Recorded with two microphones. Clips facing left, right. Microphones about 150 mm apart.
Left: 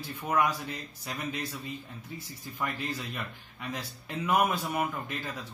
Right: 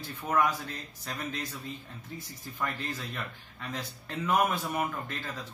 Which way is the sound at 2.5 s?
10° left (ahead or behind).